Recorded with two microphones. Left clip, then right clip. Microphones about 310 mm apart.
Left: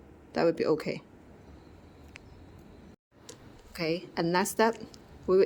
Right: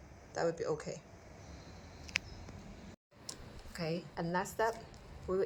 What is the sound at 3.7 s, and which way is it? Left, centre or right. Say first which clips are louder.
Speech: left 8 dB; left.